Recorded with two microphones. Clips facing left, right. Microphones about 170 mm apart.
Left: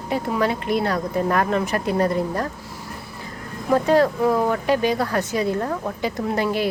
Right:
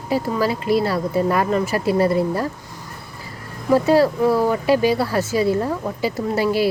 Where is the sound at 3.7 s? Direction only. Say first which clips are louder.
Right 2 dB; 5° right (ahead or behind).